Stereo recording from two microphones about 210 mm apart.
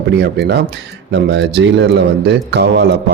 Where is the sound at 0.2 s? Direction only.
50° right (ahead or behind).